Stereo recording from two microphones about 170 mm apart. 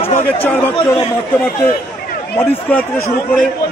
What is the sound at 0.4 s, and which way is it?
Speech, 10° left (ahead or behind).